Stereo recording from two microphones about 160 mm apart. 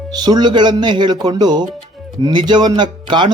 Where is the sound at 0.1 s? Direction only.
25° right (ahead or behind).